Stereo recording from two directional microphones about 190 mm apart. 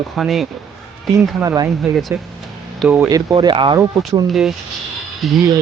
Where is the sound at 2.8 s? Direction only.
10° right (ahead or behind).